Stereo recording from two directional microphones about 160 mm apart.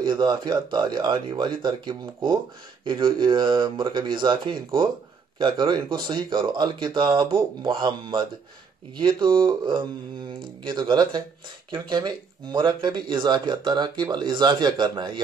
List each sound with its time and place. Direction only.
0.0 s speech: 30° right (ahead or behind)